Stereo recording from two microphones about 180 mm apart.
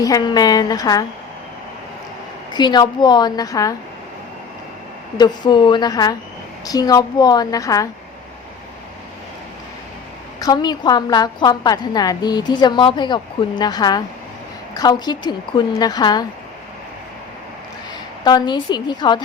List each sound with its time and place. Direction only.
0.0 s a woman's voice: 20° left (ahead or behind)
2.5 s a woman's voice: 25° left (ahead or behind)
5.1 s a woman's voice: 25° left (ahead or behind)
10.4 s a woman's voice: 20° left (ahead or behind)
18.3 s a woman's voice: 25° left (ahead or behind)